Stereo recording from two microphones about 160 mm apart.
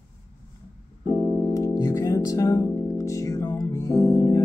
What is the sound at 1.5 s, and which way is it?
Music, 20° left (ahead or behind).